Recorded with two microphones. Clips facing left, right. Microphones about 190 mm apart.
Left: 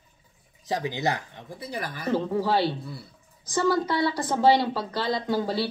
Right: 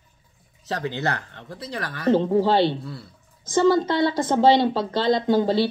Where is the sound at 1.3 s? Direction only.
10° left (ahead or behind).